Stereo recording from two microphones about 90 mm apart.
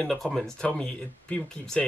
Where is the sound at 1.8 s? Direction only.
5° left (ahead or behind).